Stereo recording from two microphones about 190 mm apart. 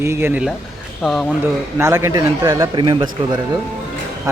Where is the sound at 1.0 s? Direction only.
Centre (ahead or behind).